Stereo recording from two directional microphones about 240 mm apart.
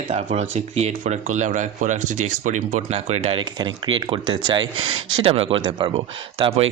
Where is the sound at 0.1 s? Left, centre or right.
Right.